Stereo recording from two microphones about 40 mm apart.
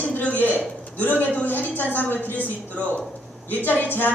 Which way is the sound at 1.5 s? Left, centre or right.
Left.